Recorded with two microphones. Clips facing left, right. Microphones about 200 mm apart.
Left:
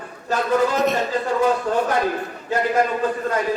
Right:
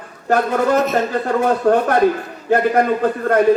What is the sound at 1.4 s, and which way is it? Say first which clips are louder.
Speech: right 5 dB; 60° right (ahead or behind).